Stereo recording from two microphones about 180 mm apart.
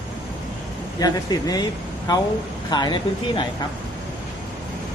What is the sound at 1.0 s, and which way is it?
Speech, 20° left (ahead or behind).